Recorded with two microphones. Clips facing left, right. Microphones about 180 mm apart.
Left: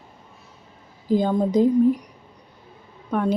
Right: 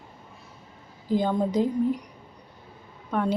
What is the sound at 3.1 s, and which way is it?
Speech, 15° left (ahead or behind).